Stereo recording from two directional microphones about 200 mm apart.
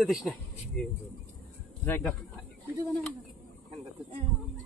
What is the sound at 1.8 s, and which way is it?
Speech, 10° left (ahead or behind).